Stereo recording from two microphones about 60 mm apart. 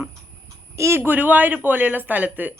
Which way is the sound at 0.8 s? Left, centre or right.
Right.